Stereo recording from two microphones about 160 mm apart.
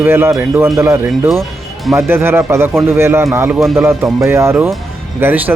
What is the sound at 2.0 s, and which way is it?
Speech, 15° right (ahead or behind).